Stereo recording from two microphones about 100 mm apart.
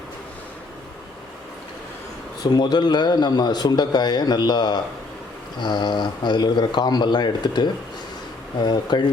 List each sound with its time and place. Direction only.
2.4 s speech: 45° left (ahead or behind)